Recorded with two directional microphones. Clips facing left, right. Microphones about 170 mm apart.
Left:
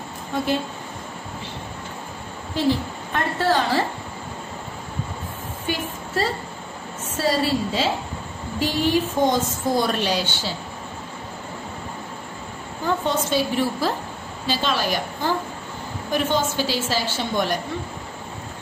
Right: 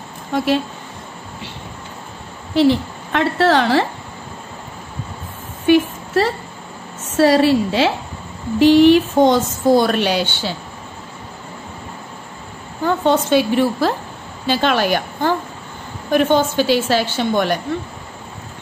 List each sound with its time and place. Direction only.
2.5 s a woman's voice: 90° right
5.7 s a woman's voice: 75° right (ahead or behind)
12.8 s a woman's voice: 65° right (ahead or behind)